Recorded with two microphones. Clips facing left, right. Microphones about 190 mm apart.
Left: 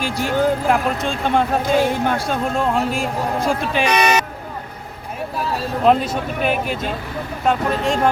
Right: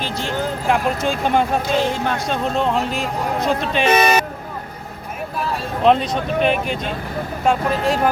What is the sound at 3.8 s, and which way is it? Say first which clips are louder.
Speech: right 2 dB; 45° right (ahead or behind).